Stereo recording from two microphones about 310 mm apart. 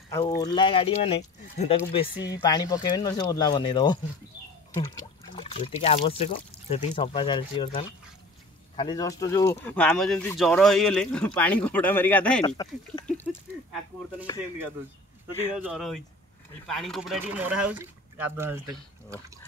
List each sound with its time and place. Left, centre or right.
0.1 s speech: centre
15.3 s speech: centre